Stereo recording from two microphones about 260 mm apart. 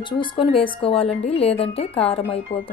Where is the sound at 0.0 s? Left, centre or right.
Centre.